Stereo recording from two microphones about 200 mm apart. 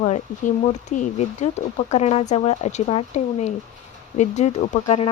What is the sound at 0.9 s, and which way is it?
Speech, 35° left (ahead or behind).